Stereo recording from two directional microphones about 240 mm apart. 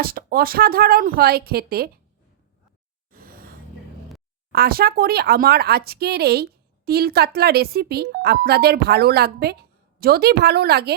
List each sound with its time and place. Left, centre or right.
0.0 s speech: right
3.1 s gasp: right
4.5 s speech: right